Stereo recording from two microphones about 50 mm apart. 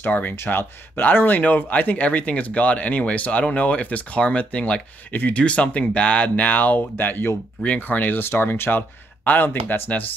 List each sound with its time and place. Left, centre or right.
0.0 s speech: left
0.4 s speech: left
7.6 s speech: left
8.2 s speech: left